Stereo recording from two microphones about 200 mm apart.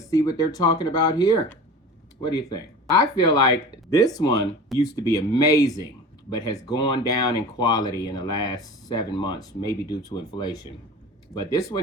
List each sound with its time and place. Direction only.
0.1 s speech: 15° left (ahead or behind)
4.7 s speech: centre (ahead or behind)
5.0 s speech: 15° left (ahead or behind)